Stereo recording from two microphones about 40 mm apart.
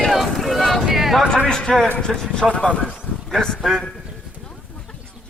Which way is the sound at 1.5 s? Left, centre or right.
Centre.